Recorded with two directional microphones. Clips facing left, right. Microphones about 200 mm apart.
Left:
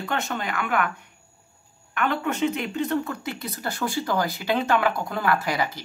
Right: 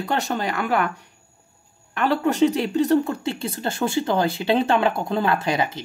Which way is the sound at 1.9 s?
35° right (ahead or behind).